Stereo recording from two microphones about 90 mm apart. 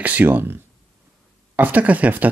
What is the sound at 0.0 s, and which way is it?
Speech, 20° right (ahead or behind).